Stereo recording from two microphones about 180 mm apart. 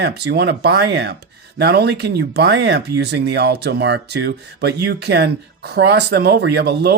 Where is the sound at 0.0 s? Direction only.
70° right (ahead or behind).